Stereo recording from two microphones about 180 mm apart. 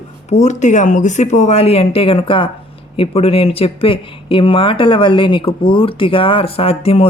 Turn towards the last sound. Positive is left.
turn(degrees=35)  # may be behind; listen again after turning